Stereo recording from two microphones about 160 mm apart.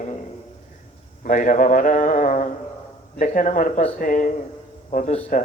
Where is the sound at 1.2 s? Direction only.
50° left (ahead or behind).